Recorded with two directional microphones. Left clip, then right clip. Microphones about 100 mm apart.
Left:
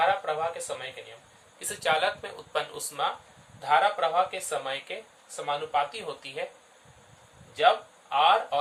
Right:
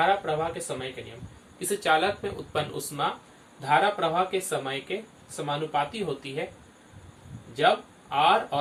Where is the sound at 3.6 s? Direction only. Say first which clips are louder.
Even; 70° left (ahead or behind).